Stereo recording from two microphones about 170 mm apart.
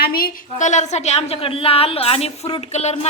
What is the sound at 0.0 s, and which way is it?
A woman's voice, 60° left (ahead or behind).